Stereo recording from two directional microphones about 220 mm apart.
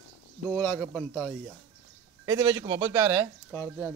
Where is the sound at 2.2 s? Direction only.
15° right (ahead or behind).